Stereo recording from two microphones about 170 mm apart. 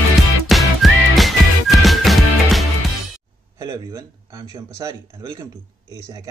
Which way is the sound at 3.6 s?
20° right (ahead or behind).